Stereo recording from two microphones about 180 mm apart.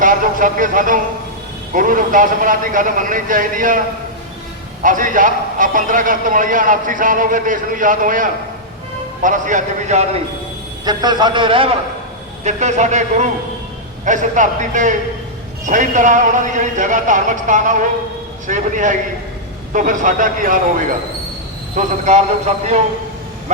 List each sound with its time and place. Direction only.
0.0 s a man's voice: 50° right (ahead or behind)
10.8 s a man's voice: 25° right (ahead or behind)
12.5 s a man's voice: 40° right (ahead or behind)